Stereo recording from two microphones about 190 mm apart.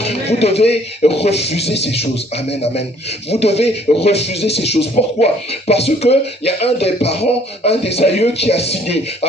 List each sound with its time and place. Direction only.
0.0 s speech: 35° left (ahead or behind)